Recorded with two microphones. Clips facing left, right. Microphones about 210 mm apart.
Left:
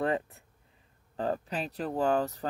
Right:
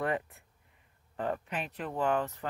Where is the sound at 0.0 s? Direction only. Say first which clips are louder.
Left 3 dB; 30° left (ahead or behind).